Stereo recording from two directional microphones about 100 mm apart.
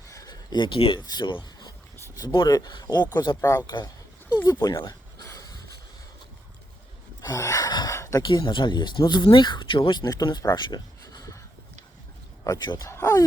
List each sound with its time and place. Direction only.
0.1 s a sound: 35° left (ahead or behind)
0.5 s speech: 55° left (ahead or behind)
1.0 s speech: 50° left (ahead or behind)
2.6 s speech: 45° left (ahead or behind)
3.2 s speech: 35° left (ahead or behind)
4.4 s a sound: 35° left (ahead or behind)
7.2 s gasp: 35° left (ahead or behind)
7.9 s a sound: 30° left (ahead or behind)
8.4 s speech: 50° left (ahead or behind)
12.7 s speech: 30° left (ahead or behind)